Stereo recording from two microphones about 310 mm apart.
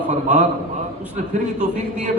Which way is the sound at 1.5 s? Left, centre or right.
Right.